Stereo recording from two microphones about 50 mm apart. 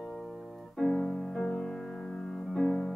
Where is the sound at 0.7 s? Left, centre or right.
Centre.